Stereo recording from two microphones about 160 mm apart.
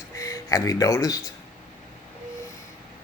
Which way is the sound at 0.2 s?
20° left (ahead or behind).